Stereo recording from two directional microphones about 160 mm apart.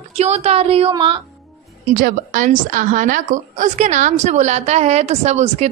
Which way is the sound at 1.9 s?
60° right (ahead or behind).